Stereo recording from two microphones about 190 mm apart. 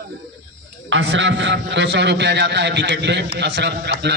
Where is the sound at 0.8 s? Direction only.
75° right (ahead or behind).